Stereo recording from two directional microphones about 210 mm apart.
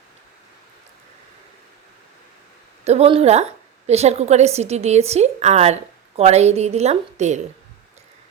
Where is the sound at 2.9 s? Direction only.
30° right (ahead or behind).